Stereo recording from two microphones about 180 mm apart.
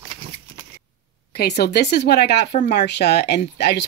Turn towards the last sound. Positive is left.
turn(degrees=65)  # may be behind; listen again after turning